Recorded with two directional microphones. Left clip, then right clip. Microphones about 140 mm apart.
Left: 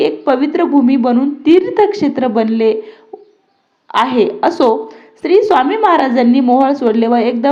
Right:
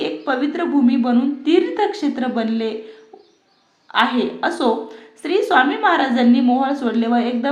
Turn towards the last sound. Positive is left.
turn(degrees=35)  # may be behind; listen again after turning